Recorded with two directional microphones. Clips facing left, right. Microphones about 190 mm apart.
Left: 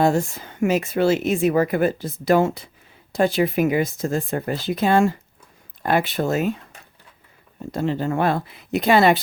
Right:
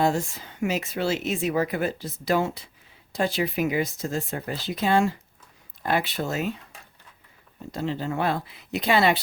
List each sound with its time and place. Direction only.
0.0 s speech: 50° left (ahead or behind)
7.7 s speech: 50° left (ahead or behind)